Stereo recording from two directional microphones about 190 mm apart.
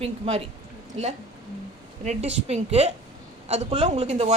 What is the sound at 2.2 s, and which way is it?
A woman's voice, 35° right (ahead or behind).